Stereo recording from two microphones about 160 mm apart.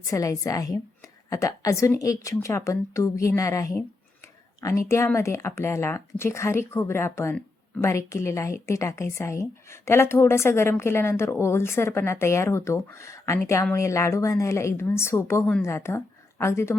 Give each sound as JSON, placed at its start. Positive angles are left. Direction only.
{"t": 0.0, "sound": "a woman's voice", "side_deg": 20}